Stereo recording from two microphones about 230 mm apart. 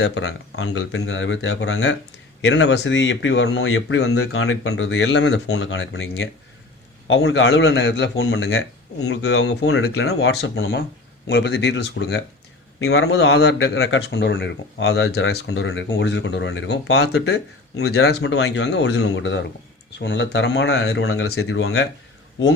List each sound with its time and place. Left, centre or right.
0.0 s a man's voice: left
15.3 s a man's voice: left